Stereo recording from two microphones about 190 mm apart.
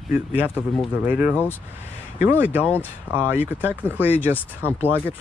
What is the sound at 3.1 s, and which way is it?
Speech, 10° right (ahead or behind).